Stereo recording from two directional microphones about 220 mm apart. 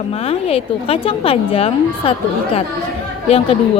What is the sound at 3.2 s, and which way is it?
Speech, 25° left (ahead or behind).